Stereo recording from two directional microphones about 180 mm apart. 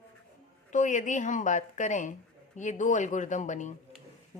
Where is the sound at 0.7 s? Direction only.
45° left (ahead or behind).